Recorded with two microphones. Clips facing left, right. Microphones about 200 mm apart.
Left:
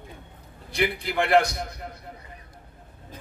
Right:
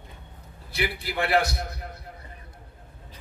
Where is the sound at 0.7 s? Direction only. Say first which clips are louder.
Left 4 dB; 5° right (ahead or behind).